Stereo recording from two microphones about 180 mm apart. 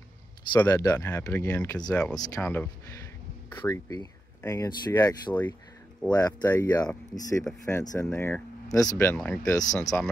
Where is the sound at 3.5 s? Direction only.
20° left (ahead or behind).